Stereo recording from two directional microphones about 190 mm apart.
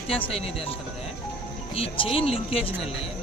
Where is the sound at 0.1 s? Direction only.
30° left (ahead or behind).